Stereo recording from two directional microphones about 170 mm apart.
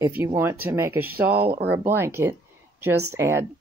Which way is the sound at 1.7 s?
15° right (ahead or behind).